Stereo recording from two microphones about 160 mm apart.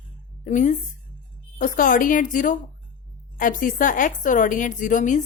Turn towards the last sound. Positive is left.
turn(degrees=50)  # may be behind; listen again after turning